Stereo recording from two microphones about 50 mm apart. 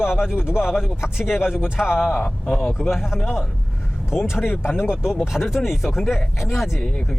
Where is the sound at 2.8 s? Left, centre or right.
Centre.